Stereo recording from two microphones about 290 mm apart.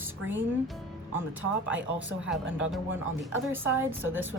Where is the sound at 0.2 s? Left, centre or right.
Right.